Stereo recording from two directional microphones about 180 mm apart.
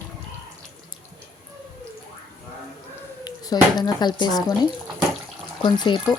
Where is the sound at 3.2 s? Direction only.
20° left (ahead or behind).